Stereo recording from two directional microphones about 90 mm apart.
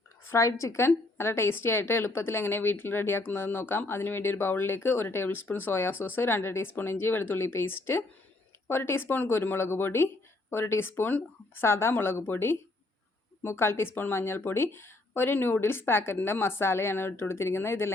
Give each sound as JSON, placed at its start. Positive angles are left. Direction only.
{"t": 0.3, "sound": "a woman's voice", "side_deg": 30}